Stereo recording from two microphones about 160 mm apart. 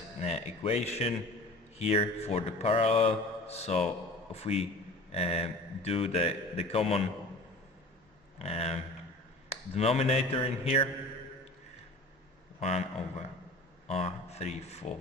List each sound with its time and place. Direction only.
0.2 s a man's voice: 40° left (ahead or behind)
8.4 s a man's voice: 40° left (ahead or behind)
12.5 s a man's voice: 40° left (ahead or behind)